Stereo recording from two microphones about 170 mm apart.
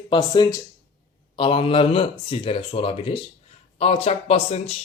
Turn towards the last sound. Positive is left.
turn(degrees=35)  # may be behind; listen again after turning